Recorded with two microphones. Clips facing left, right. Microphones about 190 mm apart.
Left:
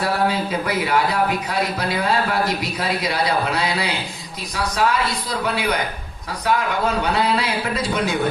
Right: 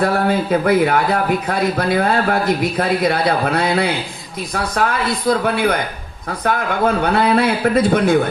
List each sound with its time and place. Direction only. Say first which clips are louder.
0.0 s speech: right 4 dB; 50° right (ahead or behind)